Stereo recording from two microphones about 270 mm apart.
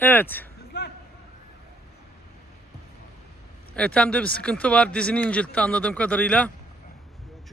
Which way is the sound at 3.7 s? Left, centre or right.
Centre.